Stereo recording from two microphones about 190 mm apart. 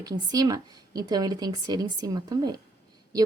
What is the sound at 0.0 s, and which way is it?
A woman's voice, 20° right (ahead or behind).